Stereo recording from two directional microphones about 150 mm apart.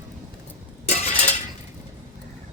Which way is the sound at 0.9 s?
45° left (ahead or behind).